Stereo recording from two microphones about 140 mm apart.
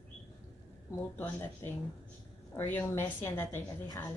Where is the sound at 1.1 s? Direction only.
15° left (ahead or behind).